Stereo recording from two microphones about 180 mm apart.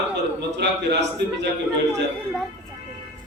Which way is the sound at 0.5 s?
70° right (ahead or behind).